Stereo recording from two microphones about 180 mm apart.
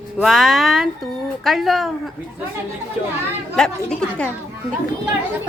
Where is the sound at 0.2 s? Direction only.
Centre (ahead or behind).